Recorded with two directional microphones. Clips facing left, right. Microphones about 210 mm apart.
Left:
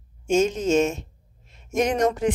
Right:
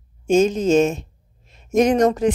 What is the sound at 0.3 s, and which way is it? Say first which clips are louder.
Speech: right 4 dB; 35° right (ahead or behind).